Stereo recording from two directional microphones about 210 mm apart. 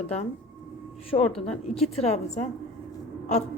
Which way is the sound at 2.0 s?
30° left (ahead or behind).